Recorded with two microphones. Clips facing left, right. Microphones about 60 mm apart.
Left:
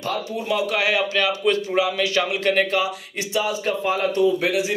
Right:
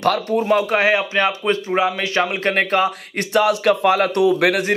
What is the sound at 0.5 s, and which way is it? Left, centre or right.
Speech, right.